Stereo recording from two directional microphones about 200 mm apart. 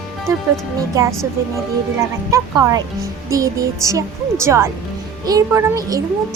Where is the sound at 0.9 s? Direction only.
15° right (ahead or behind).